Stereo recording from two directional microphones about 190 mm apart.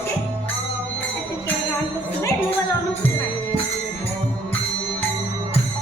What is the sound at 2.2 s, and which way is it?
Music, 15° left (ahead or behind).